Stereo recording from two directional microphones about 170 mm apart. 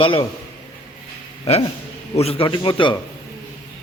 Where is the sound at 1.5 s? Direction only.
40° left (ahead or behind).